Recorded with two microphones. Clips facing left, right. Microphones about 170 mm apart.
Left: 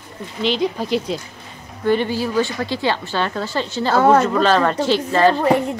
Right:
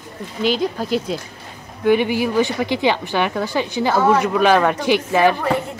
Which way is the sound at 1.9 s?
15° right (ahead or behind).